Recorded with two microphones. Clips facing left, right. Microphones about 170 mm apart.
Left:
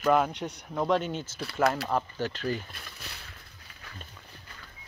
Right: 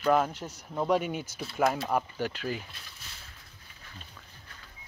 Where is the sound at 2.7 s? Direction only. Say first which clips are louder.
Left 5 dB; 65° left (ahead or behind).